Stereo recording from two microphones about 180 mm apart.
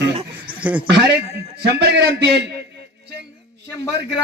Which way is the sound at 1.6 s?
65° right (ahead or behind).